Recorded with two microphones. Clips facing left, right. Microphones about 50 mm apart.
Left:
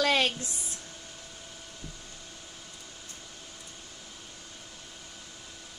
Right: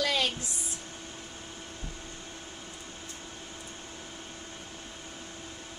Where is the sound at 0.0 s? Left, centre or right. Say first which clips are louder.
Left 3 dB; left.